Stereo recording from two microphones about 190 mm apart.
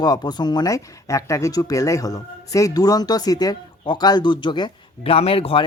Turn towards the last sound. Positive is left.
turn(degrees=30)  # may be behind; listen again after turning